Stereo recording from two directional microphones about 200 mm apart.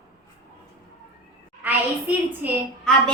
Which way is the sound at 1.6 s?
10° right (ahead or behind).